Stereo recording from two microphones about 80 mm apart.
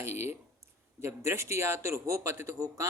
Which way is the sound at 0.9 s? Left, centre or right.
Right.